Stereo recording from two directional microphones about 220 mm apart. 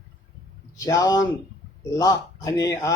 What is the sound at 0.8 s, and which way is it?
A man's voice, 15° left (ahead or behind).